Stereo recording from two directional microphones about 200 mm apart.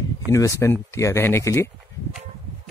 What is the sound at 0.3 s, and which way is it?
Speech, 15° left (ahead or behind).